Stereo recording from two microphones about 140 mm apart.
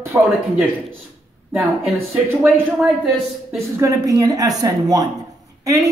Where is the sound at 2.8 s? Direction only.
5° right (ahead or behind).